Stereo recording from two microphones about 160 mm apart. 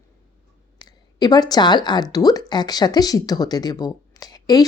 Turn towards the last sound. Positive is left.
turn(degrees=25)  # may be behind; listen again after turning